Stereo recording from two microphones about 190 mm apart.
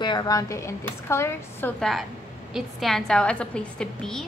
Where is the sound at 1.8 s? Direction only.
Centre (ahead or behind).